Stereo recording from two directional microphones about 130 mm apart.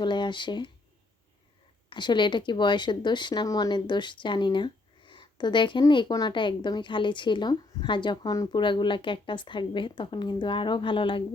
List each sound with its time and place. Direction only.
0.0 s a woman's voice: 35° left (ahead or behind)
1.9 s a woman's voice: 35° left (ahead or behind)